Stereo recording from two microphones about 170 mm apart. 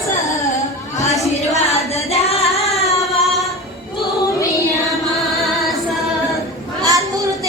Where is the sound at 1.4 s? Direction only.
40° left (ahead or behind).